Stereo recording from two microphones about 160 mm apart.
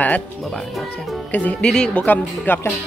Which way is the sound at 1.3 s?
10° left (ahead or behind).